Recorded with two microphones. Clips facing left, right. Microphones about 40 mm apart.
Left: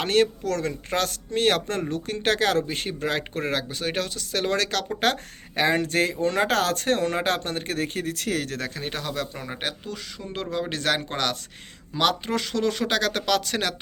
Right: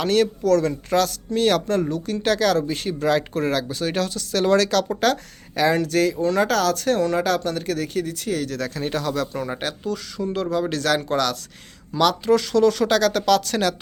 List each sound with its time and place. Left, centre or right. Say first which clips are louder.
0.0 s speech: right 2 dB; left
0.4 s speech: right 8 dB; centre
4.9 s speech: right 3 dB; left
8.1 s speech: right 2 dB; left
8.5 s speech: right 5 dB; left